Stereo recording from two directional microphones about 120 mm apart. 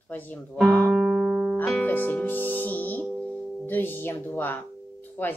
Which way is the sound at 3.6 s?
15° left (ahead or behind).